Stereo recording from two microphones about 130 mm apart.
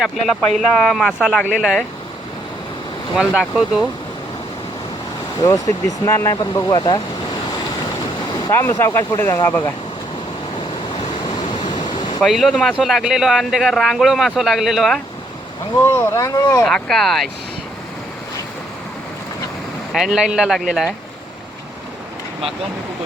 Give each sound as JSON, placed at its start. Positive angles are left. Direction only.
{"t": 0.0, "sound": "speech", "side_deg": 0}
{"t": 3.2, "sound": "speech", "side_deg": -5}
{"t": 5.4, "sound": "speech", "side_deg": 25}
{"t": 8.4, "sound": "speech", "side_deg": 20}
{"t": 11.3, "sound": "waves", "side_deg": 35}
{"t": 12.2, "sound": "speech", "side_deg": 0}
{"t": 15.8, "sound": "speech", "side_deg": 20}
{"t": 16.6, "sound": "speech", "side_deg": 5}
{"t": 19.9, "sound": "speech", "side_deg": -5}